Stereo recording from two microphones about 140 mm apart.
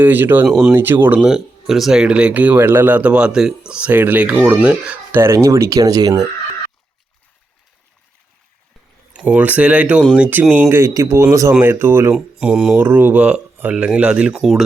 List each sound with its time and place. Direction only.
0.0 s speech: 15° right (ahead or behind)
0.4 s speech: centre (ahead or behind)
0.7 s speech: 15° right (ahead or behind)
1.3 s speech: centre (ahead or behind)
5.2 s speech: 20° right (ahead or behind)
9.1 s speech: 10° right (ahead or behind)
12.1 s speech: 5° right (ahead or behind)